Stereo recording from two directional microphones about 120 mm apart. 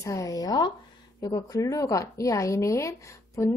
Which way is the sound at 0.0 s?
30° left (ahead or behind).